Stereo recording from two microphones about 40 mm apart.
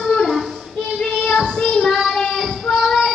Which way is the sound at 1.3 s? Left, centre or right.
Centre.